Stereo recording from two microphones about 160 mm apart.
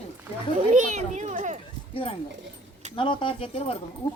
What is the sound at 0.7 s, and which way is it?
Speech, 50° right (ahead or behind).